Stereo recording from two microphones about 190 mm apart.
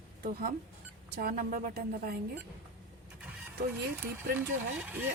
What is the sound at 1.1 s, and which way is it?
A woman's voice, 50° right (ahead or behind).